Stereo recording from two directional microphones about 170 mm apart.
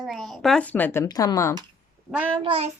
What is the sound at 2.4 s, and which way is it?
Child singing, 35° right (ahead or behind).